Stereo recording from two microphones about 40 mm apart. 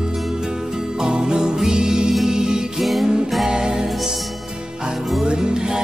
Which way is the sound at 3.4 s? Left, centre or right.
Centre.